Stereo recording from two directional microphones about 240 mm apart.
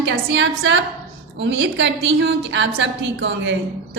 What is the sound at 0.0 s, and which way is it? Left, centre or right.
A woman's voice, right.